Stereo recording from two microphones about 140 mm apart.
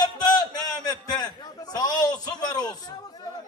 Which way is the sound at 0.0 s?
30° left (ahead or behind).